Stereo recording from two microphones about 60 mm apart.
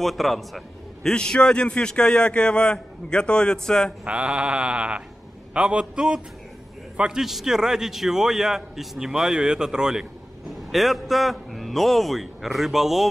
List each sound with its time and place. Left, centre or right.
0.0 s a man's voice: centre
1.0 s a man's voice: centre
4.0 s sheep: centre
5.5 s a man's voice: centre
10.5 s a man's voice: centre